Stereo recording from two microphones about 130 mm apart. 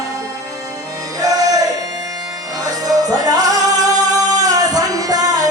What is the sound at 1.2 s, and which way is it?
Music, 25° right (ahead or behind).